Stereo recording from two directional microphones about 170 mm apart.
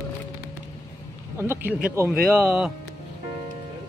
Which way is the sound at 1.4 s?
15° right (ahead or behind).